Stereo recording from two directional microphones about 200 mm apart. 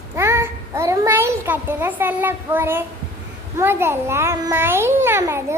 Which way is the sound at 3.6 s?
10° right (ahead or behind).